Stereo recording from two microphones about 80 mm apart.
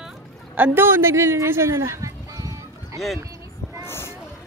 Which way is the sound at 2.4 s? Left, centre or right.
Right.